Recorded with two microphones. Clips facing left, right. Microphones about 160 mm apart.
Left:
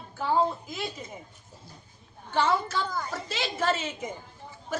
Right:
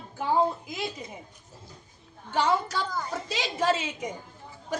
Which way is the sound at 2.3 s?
15° right (ahead or behind).